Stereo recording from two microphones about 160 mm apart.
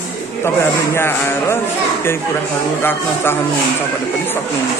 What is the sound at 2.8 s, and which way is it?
Speech, 15° left (ahead or behind).